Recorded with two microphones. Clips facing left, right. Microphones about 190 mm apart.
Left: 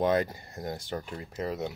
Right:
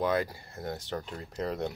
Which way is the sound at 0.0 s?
25° left (ahead or behind).